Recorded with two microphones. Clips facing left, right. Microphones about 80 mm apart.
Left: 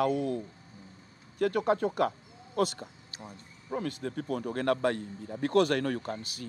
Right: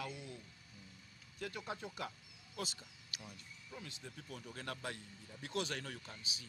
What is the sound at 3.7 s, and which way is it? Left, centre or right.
A man's voice, left.